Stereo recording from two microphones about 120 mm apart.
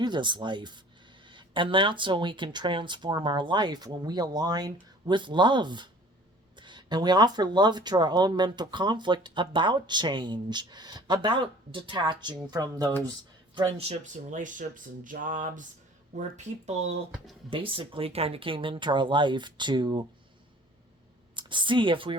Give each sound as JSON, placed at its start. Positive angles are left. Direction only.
{"t": 0.0, "sound": "speech", "side_deg": -40}
{"t": 13.7, "sound": "speech", "side_deg": -60}
{"t": 16.1, "sound": "speech", "side_deg": -75}
{"t": 17.5, "sound": "speech", "side_deg": -45}
{"t": 21.3, "sound": "speech", "side_deg": -40}